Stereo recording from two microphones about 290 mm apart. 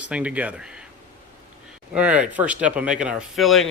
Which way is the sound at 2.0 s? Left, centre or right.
Centre.